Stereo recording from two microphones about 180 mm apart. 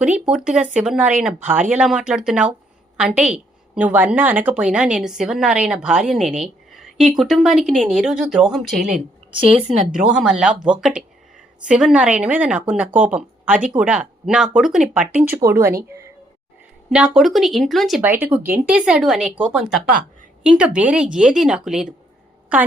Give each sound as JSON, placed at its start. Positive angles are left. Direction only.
{"t": 0.3, "sound": "a woman's voice", "side_deg": -5}
{"t": 9.6, "sound": "speech", "side_deg": -40}
{"t": 9.8, "sound": "a woman's voice", "side_deg": -5}
{"t": 16.9, "sound": "a woman's voice", "side_deg": -5}